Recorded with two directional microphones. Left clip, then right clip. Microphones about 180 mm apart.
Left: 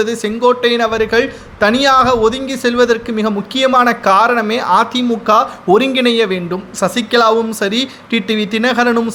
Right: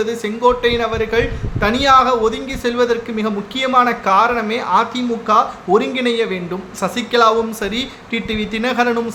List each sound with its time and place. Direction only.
0.0 s a man's voice: 30° left (ahead or behind)